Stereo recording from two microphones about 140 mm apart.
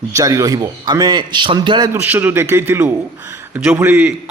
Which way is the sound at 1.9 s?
15° right (ahead or behind).